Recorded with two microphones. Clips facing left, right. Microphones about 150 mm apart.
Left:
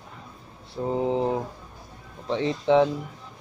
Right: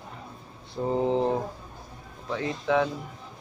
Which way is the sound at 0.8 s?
Centre (ahead or behind).